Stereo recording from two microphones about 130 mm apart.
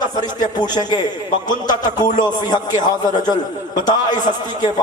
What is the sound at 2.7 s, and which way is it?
Speech, 80° left.